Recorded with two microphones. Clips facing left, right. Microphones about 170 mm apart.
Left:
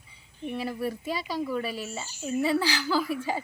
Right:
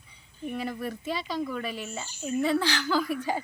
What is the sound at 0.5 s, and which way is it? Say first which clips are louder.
Speech: left 2 dB; 10° left (ahead or behind).